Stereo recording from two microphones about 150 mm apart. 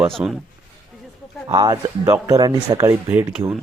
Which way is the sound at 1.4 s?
30° right (ahead or behind).